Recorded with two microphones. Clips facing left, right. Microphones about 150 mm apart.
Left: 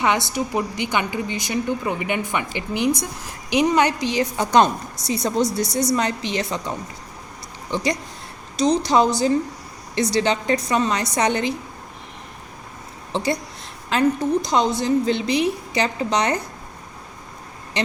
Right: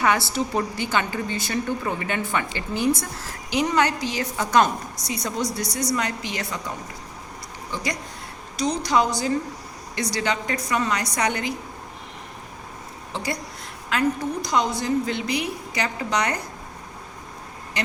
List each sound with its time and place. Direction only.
0.0 s a woman's voice: 20° left (ahead or behind)
13.1 s a woman's voice: 25° left (ahead or behind)
17.7 s a sound: 25° left (ahead or behind)